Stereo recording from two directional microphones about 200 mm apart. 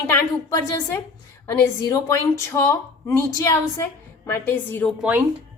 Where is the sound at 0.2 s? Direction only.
15° left (ahead or behind).